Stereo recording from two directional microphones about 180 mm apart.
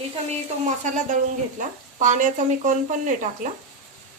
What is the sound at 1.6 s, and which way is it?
Speech, 45° right (ahead or behind).